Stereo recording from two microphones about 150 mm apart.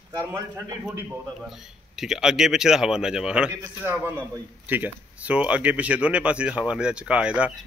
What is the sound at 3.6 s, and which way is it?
A man's voice, 15° right (ahead or behind).